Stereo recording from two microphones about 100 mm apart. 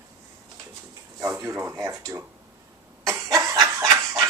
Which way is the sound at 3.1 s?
35° right (ahead or behind).